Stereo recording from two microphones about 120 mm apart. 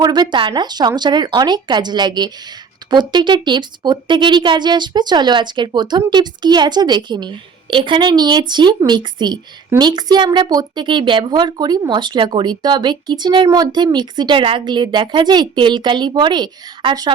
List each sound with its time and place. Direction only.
0.0 s a woman's voice: 35° right (ahead or behind)